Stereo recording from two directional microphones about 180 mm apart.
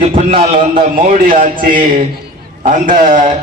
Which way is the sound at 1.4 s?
50° right (ahead or behind).